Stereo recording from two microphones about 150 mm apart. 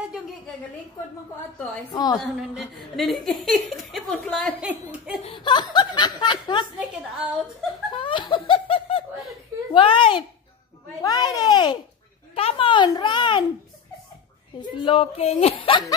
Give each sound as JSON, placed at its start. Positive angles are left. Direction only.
{"t": 1.9, "sound": "speech", "side_deg": 25}
{"t": 2.1, "sound": "speech", "side_deg": 0}
{"t": 4.6, "sound": "a woman's voice", "side_deg": -10}
{"t": 5.2, "sound": "speech", "side_deg": 35}
{"t": 6.8, "sound": "speech", "side_deg": -5}
{"t": 7.9, "sound": "laughter", "side_deg": 35}
{"t": 9.8, "sound": "a child's voice", "side_deg": 35}
{"t": 14.8, "sound": "a child's voice", "side_deg": 35}